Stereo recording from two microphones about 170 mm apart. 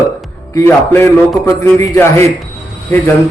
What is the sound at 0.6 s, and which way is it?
A man's voice, 15° left (ahead or behind).